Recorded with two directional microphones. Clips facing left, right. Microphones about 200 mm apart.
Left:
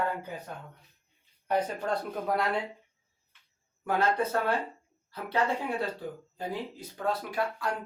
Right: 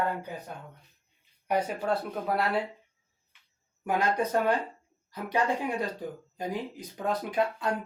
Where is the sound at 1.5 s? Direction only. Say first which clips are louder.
Right 1 dB; 10° right (ahead or behind).